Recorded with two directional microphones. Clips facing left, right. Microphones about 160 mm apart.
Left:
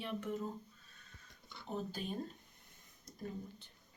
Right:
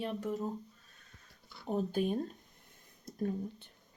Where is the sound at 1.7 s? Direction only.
55° right (ahead or behind).